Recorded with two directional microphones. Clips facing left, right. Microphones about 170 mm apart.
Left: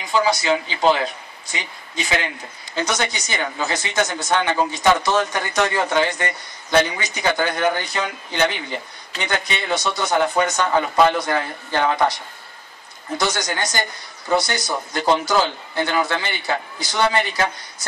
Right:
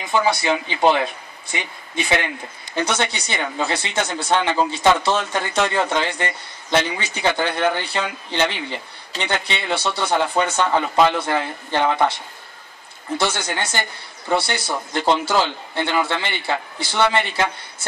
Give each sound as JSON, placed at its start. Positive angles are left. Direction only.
{"t": 0.5, "sound": "speech", "side_deg": -20}
{"t": 2.8, "sound": "speech", "side_deg": -30}
{"t": 13.2, "sound": "speech", "side_deg": -30}